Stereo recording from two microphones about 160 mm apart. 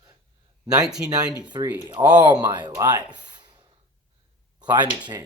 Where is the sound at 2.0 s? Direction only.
30° right (ahead or behind).